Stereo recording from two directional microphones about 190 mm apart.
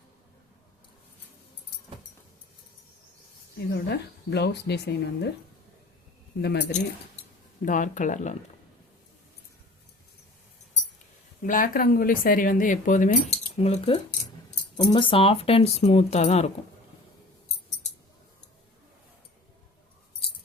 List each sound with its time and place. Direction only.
3.7 s speech: 60° left (ahead or behind)
6.4 s speech: 60° left (ahead or behind)
7.6 s speech: 45° left (ahead or behind)
11.4 s speech: 45° left (ahead or behind)